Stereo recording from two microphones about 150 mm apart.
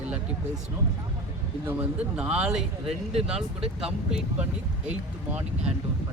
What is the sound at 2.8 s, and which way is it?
Speech, 40° right (ahead or behind).